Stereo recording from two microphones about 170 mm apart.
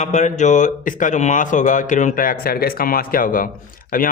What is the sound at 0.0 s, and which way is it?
A man's voice, 45° left (ahead or behind).